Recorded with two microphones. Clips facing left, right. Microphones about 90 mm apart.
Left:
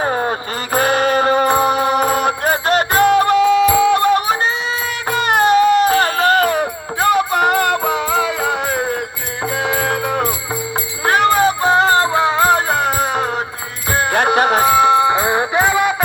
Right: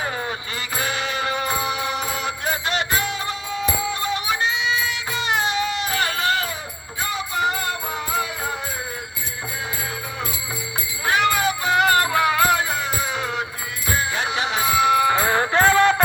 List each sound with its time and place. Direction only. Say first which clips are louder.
0.0 s music: left 9 dB; 45° left (ahead or behind); by 9.0 s 65° left (ahead or behind)
9.5 s music: left 13 dB; 90° left; by 10.3 s 65° left (ahead or behind)
11.0 s music: left 7 dB; 45° left (ahead or behind)
12.5 s music: left 7 dB; 50° left (ahead or behind)
13.9 s music: left 10 dB; 55° left (ahead or behind); by 16.0 s 10° left (ahead or behind)